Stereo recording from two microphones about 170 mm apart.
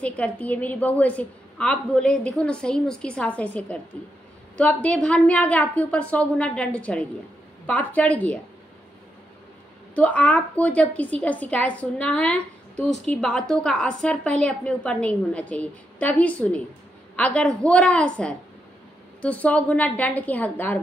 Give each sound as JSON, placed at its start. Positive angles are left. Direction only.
{"t": 0.0, "sound": "a woman's voice", "side_deg": 10}
{"t": 9.9, "sound": "a woman's voice", "side_deg": 10}